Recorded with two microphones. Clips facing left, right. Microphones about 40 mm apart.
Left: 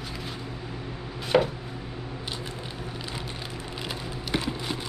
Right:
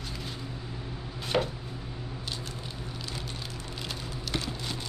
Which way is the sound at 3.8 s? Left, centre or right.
Centre.